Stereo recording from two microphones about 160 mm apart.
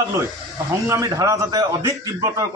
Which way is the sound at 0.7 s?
20° right (ahead or behind).